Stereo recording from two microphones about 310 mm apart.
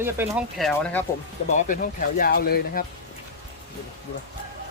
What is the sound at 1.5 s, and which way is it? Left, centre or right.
Speech, left.